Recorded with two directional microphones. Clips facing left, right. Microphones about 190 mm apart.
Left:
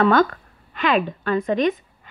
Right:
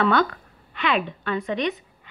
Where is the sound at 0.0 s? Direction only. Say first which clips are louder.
Left 4 dB; 45° left (ahead or behind).